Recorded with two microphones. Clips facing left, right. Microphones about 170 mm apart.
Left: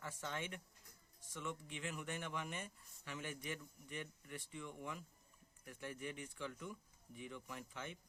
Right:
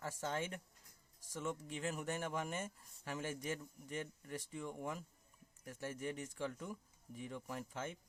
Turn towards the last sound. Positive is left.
turn(degrees=-45)  # may be behind; listen again after turning